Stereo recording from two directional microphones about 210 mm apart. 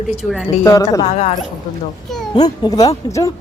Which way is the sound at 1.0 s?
30° left (ahead or behind).